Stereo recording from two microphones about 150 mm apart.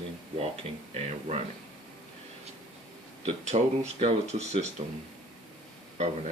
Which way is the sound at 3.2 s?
50° right (ahead or behind).